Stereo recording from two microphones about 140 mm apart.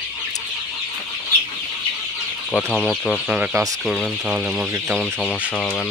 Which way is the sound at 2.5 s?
Centre (ahead or behind).